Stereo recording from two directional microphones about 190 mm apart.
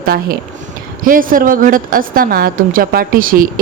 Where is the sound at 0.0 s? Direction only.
50° right (ahead or behind).